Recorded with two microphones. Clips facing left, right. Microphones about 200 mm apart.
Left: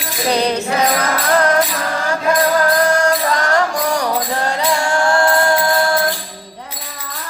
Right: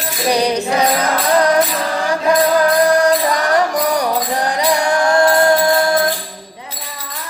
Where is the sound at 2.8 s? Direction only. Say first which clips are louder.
Right 3 dB; 15° right (ahead or behind).